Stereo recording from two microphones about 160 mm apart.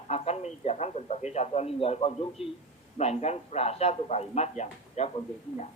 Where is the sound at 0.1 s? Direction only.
40° left (ahead or behind).